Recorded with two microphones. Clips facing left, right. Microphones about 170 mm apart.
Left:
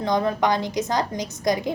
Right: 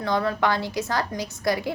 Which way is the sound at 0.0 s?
20° left (ahead or behind).